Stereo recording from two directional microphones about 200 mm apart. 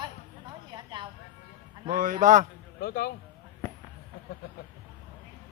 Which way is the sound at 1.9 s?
40° right (ahead or behind).